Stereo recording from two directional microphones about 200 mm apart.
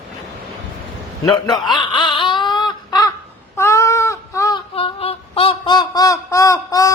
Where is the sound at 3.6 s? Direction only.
15° left (ahead or behind).